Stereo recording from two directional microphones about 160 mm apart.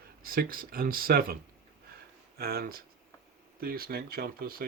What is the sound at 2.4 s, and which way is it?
Speech, 70° right (ahead or behind).